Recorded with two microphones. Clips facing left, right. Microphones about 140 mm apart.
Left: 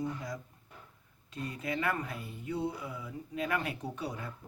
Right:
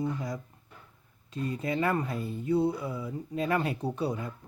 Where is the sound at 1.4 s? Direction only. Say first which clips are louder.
Right 6 dB; 25° right (ahead or behind).